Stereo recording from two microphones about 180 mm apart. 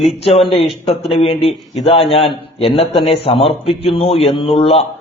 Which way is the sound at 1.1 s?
35° left (ahead or behind).